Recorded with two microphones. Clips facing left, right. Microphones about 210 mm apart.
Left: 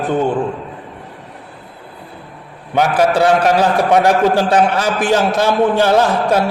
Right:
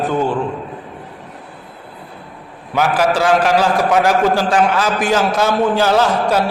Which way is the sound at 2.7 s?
35° left (ahead or behind).